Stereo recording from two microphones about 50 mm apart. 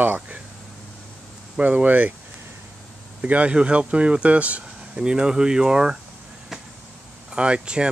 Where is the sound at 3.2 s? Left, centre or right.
Right.